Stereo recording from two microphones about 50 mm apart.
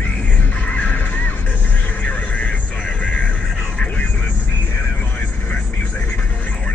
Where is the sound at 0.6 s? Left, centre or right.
Left.